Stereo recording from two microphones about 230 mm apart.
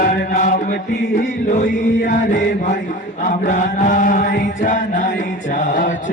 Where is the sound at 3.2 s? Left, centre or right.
Left.